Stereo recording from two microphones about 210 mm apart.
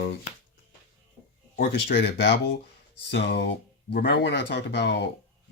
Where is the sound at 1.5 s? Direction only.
55° left (ahead or behind).